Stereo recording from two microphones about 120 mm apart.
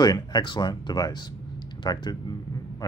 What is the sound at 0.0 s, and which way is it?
Speech, 35° left (ahead or behind).